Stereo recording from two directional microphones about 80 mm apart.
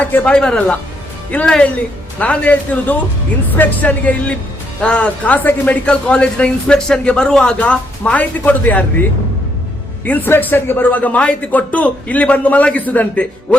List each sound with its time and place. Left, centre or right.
0.0 s speech: centre
10.1 s a man's voice: left